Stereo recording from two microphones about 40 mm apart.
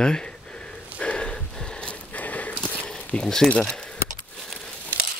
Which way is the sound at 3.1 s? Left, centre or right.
Left.